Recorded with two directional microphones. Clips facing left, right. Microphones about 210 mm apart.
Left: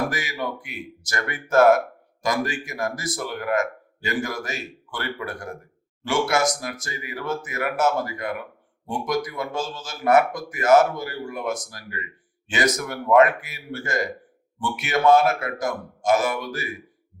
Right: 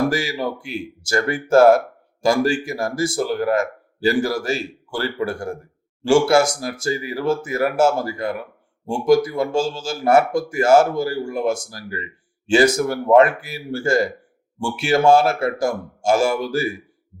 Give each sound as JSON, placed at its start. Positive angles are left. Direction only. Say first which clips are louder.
{"t": 0.1, "sound": "speech", "louder": "right 6 dB", "side_deg": -30}